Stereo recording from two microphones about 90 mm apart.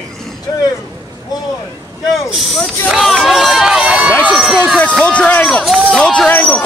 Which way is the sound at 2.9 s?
Centre (ahead or behind).